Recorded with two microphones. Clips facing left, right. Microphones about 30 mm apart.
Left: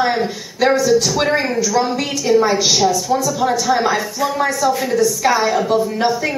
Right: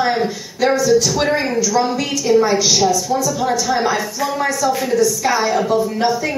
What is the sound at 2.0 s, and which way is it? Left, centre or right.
Speech, left.